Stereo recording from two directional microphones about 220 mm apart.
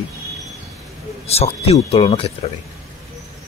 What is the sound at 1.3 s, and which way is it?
Speech, 30° left (ahead or behind).